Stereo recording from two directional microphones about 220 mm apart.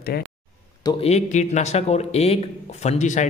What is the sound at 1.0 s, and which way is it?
Speech, 30° left (ahead or behind).